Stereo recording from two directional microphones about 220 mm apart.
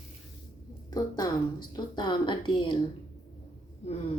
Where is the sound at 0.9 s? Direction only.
15° left (ahead or behind).